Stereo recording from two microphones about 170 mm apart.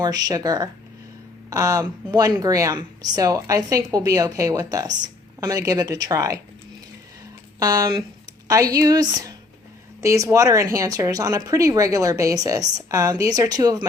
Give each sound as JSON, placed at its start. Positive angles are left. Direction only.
{"t": 0.0, "sound": "speech", "side_deg": -20}
{"t": 7.6, "sound": "speech", "side_deg": -20}